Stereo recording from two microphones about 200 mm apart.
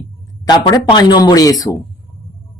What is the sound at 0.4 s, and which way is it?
Speech, 25° left (ahead or behind).